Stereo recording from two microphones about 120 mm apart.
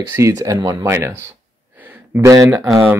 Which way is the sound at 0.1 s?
25° right (ahead or behind).